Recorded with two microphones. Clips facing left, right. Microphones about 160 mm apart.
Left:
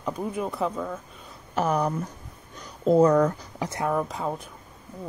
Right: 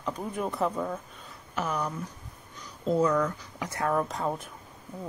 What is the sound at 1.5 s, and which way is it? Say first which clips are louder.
Speech: left 7 dB; 45° left (ahead or behind).